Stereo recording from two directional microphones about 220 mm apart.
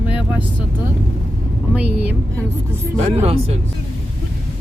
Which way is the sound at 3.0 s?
30° right (ahead or behind).